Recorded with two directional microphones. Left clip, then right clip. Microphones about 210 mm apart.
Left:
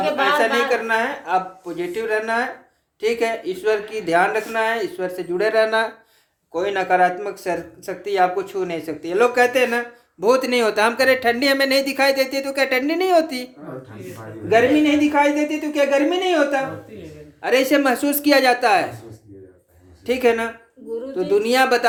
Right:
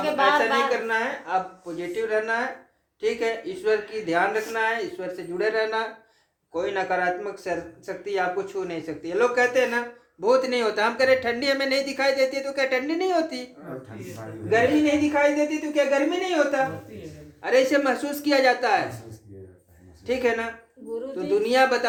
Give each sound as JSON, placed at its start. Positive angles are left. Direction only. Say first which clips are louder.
{"t": 0.3, "sound": "speech", "louder": "left 4 dB", "side_deg": 50}
{"t": 14.5, "sound": "speech", "louder": "left 5 dB", "side_deg": 50}
{"t": 20.1, "sound": "speech", "louder": "left 6 dB", "side_deg": 50}